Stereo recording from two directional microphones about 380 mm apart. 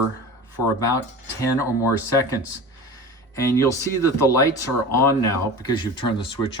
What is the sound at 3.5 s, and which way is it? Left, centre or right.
Speech, centre.